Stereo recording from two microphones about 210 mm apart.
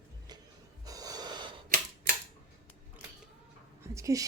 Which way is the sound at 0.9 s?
15° right (ahead or behind).